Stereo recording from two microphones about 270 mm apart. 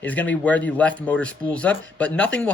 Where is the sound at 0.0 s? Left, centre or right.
Centre.